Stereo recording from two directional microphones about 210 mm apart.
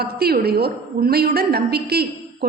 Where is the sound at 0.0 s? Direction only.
50° right (ahead or behind).